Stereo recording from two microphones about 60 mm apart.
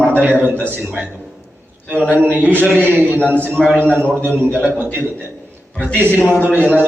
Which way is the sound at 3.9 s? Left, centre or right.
Right.